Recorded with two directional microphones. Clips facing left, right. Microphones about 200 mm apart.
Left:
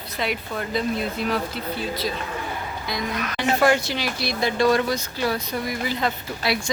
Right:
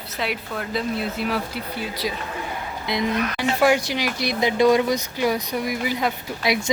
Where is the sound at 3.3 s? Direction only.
10° right (ahead or behind).